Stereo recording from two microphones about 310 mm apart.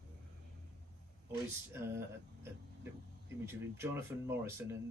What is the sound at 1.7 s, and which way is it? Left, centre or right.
Speech, centre.